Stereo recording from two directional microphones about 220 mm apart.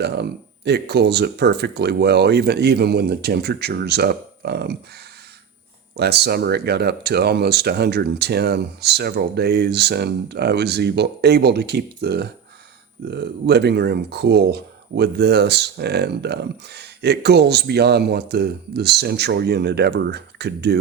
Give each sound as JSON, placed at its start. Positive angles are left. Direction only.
{"t": 0.0, "sound": "speech", "side_deg": -50}
{"t": 6.0, "sound": "speech", "side_deg": -45}